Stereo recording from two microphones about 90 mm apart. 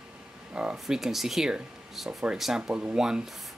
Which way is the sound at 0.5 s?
10° right (ahead or behind).